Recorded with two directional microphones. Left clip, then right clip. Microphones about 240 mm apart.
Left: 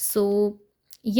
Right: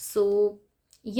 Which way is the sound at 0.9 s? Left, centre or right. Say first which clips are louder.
Left 7 dB; left.